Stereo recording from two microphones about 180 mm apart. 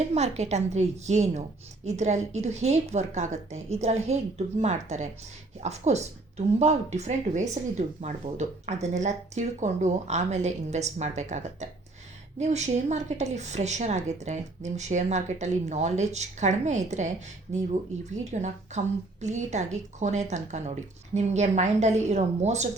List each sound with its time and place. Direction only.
0.1 s a woman's voice: 35° right (ahead or behind)